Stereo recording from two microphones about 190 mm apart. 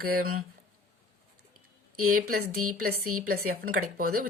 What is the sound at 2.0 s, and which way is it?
A woman's voice, 45° right (ahead or behind).